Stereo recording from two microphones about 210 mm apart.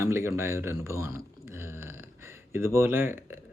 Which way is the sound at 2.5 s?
10° right (ahead or behind).